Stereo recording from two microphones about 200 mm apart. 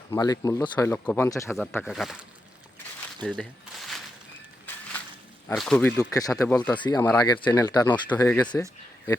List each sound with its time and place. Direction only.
0.1 s speech: 15° left (ahead or behind)
1.8 s speech: centre (ahead or behind)
3.2 s a sound: centre (ahead or behind)
5.5 s speech: 5° left (ahead or behind)
6.7 s speech: 25° left (ahead or behind)